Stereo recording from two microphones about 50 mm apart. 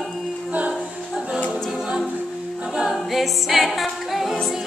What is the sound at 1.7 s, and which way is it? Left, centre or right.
A capella, centre.